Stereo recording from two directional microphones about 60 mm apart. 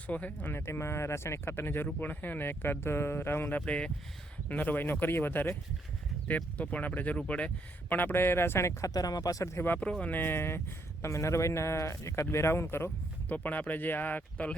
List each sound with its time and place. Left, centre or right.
0.1 s speech: left
0.5 s speech: left
3.5 s speech: left
6.2 s speech: left
8.9 s speech: left
9.6 s speech: left
11.0 s speech: left
13.2 s speech: left